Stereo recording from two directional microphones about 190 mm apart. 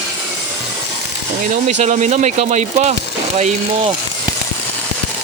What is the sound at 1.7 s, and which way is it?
Speech, 40° right (ahead or behind).